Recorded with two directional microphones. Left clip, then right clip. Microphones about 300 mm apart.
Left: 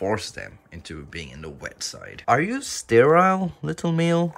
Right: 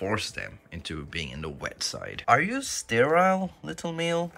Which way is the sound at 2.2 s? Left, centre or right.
Left.